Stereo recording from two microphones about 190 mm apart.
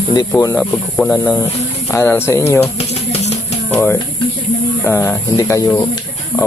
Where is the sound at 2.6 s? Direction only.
35° left (ahead or behind).